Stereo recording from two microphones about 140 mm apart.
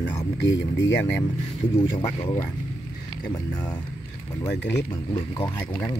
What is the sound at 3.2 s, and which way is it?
Speech, 25° left (ahead or behind).